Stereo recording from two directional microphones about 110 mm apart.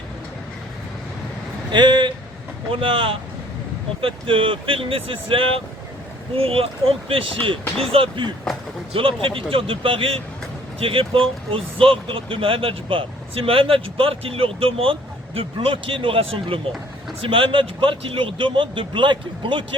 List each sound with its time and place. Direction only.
1.7 s speech: 45° right (ahead or behind)